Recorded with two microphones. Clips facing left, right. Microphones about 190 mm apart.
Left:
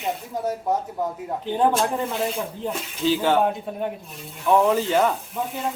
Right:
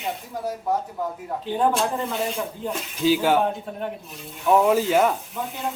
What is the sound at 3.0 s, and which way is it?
Speech, 10° right (ahead or behind).